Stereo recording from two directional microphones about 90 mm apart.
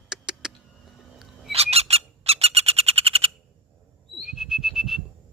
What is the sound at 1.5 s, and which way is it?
Bird, 90° right.